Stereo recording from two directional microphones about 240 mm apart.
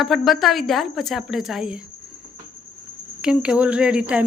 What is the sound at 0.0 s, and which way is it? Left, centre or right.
Speech, centre.